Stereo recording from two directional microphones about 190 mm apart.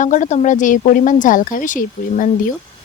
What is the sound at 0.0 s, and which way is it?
Speech, 40° left (ahead or behind).